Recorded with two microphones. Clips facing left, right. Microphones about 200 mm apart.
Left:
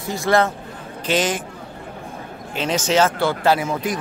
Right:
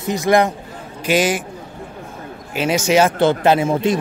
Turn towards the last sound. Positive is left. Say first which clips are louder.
# right 4 dB
turn(degrees=-25)  # may be behind; listen again after turning